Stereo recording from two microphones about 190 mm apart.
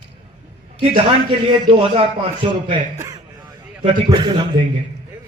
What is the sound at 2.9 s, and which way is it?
Speech, 15° right (ahead or behind).